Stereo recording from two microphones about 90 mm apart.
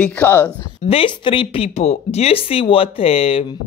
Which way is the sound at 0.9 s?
70° left (ahead or behind).